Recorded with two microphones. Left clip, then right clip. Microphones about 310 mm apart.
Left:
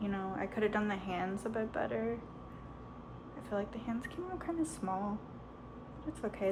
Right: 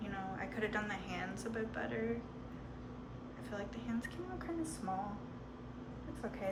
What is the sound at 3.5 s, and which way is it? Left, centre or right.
A woman's voice, centre.